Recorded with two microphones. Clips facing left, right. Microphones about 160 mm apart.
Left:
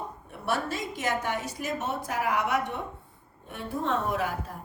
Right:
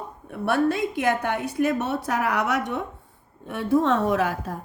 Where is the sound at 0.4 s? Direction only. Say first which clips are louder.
Right 8 dB; 60° right (ahead or behind).